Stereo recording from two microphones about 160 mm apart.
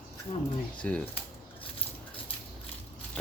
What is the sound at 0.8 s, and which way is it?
Speech, 10° left (ahead or behind).